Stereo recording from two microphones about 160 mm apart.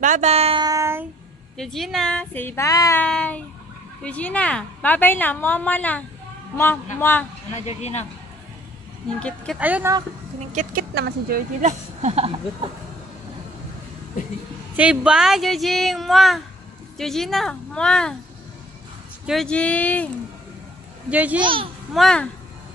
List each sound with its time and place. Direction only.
0.0 s speech: 45° right (ahead or behind)
0.6 s child singing: 20° right (ahead or behind)
1.6 s a woman's voice: centre (ahead or behind); by 3.0 s 20° left (ahead or behind)
3.0 s a woman's voice: 5° left (ahead or behind)
7.5 s speech: 45° left (ahead or behind)
9.6 s speech: 10° right (ahead or behind)
10.5 s speech: 55° right (ahead or behind)
11.0 s speech: 80° right
12.0 s speech: 40° right (ahead or behind)
14.8 s speech: 5° right (ahead or behind)
19.2 s a woman's voice: 5° left (ahead or behind)
21.1 s speech: 10° right (ahead or behind)
21.4 s speech: 30° right (ahead or behind)
21.9 s speech: 5° left (ahead or behind)